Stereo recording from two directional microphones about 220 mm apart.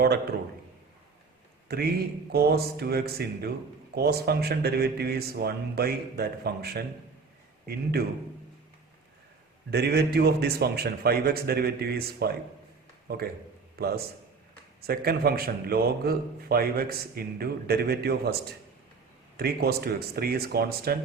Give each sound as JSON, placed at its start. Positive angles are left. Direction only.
{"t": 0.0, "sound": "a man's voice", "side_deg": -45}
{"t": 1.6, "sound": "a man's voice", "side_deg": -45}
{"t": 9.7, "sound": "a man's voice", "side_deg": -45}
{"t": 13.7, "sound": "a man's voice", "side_deg": -45}
{"t": 19.4, "sound": "a man's voice", "side_deg": -45}